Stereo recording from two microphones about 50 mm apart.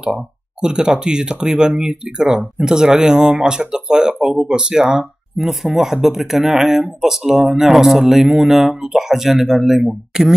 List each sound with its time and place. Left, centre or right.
0.0 s speech: centre
5.5 s speech: centre